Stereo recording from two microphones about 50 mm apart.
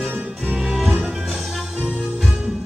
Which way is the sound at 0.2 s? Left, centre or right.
Centre.